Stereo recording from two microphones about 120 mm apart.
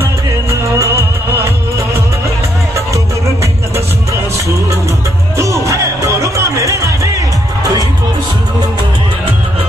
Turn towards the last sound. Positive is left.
turn(degrees=-30)  # may be behind; listen again after turning